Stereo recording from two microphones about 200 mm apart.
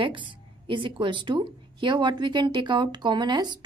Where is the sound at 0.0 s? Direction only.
25° right (ahead or behind).